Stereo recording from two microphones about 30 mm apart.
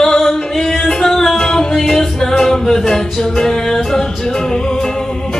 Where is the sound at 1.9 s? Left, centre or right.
Centre.